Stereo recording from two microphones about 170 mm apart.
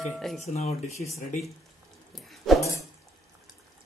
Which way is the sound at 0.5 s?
40° left (ahead or behind).